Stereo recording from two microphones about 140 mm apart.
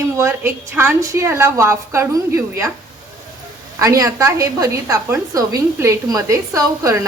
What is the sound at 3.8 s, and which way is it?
A woman's voice, 20° right (ahead or behind).